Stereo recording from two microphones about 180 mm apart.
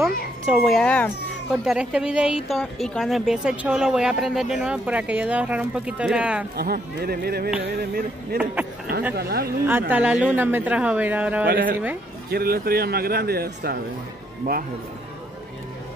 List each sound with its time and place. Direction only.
0.0 s a woman's voice: centre (ahead or behind)
1.5 s speech: 5° right (ahead or behind)
6.5 s speech: 55° right (ahead or behind)
9.7 s speech: 10° right (ahead or behind)
11.4 s speech: 55° right (ahead or behind)